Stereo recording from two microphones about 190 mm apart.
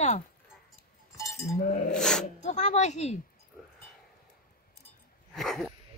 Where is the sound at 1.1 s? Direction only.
15° left (ahead or behind).